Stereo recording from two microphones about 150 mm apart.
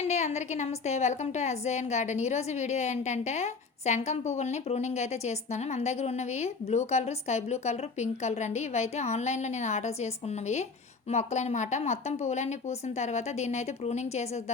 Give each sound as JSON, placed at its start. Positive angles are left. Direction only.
{"t": 0.1, "sound": "a woman's voice", "side_deg": 50}